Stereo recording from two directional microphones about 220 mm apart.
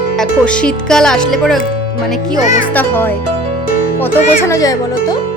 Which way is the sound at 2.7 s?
10° left (ahead or behind).